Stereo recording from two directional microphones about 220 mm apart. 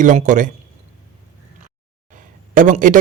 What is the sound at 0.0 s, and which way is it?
Speech, 35° right (ahead or behind).